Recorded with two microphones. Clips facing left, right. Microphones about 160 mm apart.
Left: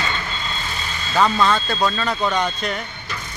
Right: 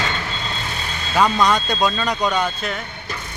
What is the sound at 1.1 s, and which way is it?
Speech, 10° right (ahead or behind).